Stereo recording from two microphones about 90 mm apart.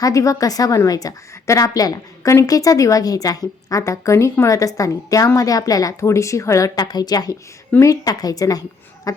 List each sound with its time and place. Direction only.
0.0 s a woman's voice: 40° left (ahead or behind)